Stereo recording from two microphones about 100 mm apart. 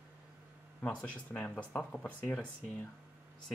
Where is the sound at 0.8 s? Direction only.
15° left (ahead or behind).